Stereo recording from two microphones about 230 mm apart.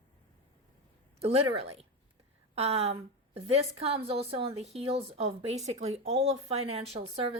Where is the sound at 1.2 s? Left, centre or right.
Right.